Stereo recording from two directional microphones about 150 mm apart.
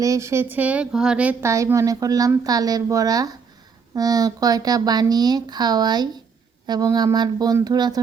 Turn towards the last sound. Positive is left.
turn(degrees=-25)  # may be behind; listen again after turning